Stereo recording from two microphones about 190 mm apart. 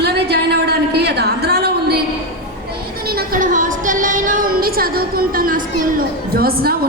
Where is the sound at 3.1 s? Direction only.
45° right (ahead or behind).